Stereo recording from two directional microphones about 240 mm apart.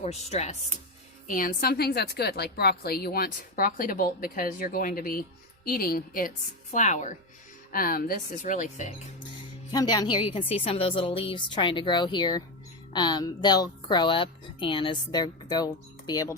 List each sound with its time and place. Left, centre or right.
0.0 s a woman's voice: left
9.7 s a woman's voice: centre